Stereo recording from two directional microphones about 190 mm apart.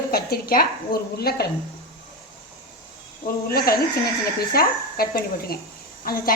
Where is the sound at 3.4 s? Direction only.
55° left (ahead or behind).